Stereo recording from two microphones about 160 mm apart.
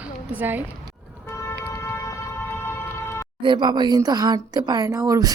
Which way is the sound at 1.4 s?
15° left (ahead or behind).